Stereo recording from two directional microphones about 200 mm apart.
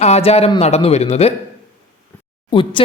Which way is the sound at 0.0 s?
30° left (ahead or behind).